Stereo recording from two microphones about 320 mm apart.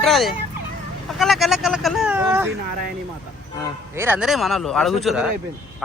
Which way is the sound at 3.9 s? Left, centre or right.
Centre.